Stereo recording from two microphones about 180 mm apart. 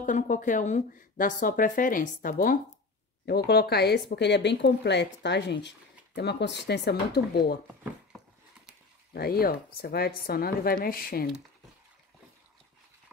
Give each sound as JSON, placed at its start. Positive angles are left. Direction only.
{"t": 0.0, "sound": "speech", "side_deg": 45}
{"t": 3.3, "sound": "speech", "side_deg": 65}
{"t": 9.1, "sound": "a woman's voice", "side_deg": 60}